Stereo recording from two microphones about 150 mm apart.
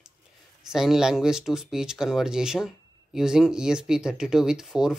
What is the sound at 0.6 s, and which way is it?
Speech, 5° right (ahead or behind).